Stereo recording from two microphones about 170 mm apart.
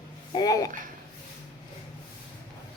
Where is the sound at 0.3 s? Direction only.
20° left (ahead or behind).